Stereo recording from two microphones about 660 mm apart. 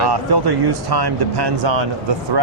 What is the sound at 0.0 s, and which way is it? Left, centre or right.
A man's voice, right.